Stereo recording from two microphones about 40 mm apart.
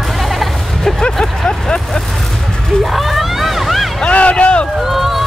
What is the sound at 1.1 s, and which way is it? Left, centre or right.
Speech, centre.